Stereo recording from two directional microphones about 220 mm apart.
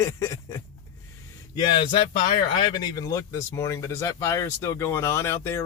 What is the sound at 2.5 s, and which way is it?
Speech, 20° left (ahead or behind).